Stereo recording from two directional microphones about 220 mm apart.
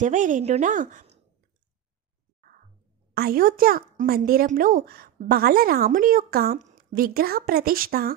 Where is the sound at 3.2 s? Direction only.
45° right (ahead or behind).